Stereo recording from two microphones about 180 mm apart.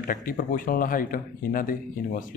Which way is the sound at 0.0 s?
50° left (ahead or behind).